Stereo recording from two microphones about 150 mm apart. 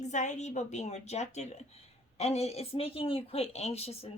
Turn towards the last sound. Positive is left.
turn(degrees=45)  # may be behind; listen again after turning